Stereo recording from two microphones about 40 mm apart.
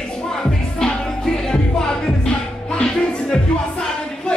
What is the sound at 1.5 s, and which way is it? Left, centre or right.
Music, centre.